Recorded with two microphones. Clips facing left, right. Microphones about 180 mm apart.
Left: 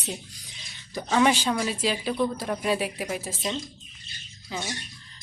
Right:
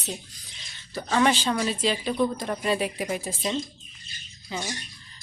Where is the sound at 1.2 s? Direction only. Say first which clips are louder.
Even; 10° left (ahead or behind).